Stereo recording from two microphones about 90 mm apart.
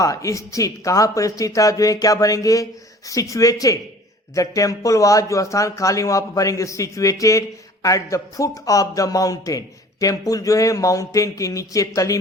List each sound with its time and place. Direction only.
0.0 s a man's voice: 40° left (ahead or behind)